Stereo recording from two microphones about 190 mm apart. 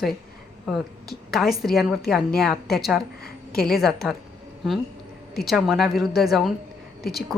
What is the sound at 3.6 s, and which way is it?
Speech, centre (ahead or behind).